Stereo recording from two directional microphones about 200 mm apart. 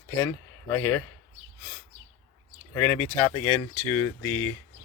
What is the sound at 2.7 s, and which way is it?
Speech, 10° left (ahead or behind).